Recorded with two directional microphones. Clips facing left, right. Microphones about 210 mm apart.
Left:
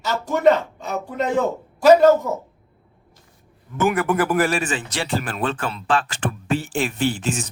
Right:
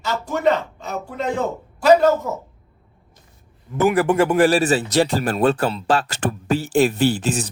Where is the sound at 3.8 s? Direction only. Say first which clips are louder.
Right 3 dB; 30° right (ahead or behind).